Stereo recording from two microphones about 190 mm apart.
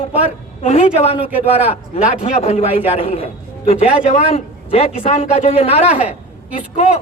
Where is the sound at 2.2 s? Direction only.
35° left (ahead or behind).